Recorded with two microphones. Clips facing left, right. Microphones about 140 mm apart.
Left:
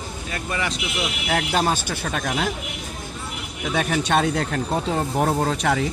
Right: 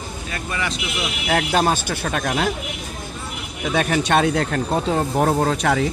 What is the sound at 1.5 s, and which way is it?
Speech, 55° right (ahead or behind).